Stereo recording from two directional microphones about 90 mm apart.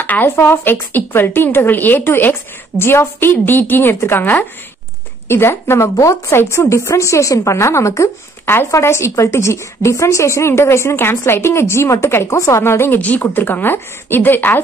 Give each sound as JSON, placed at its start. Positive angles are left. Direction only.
{"t": 0.0, "sound": "a woman's voice", "side_deg": 20}